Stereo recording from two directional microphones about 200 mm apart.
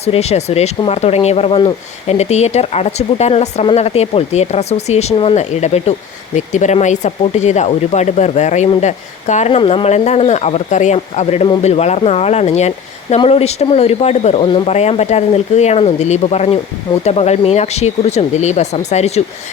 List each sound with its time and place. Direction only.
0.0 s speech: 30° left (ahead or behind)